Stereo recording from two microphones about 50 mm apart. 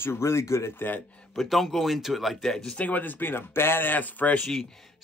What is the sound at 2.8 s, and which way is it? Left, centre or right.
Speech, left.